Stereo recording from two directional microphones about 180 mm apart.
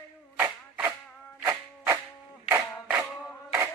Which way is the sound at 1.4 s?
15° right (ahead or behind).